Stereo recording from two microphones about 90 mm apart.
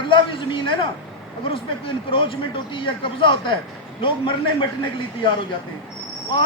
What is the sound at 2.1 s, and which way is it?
A man's voice, 70° left (ahead or behind).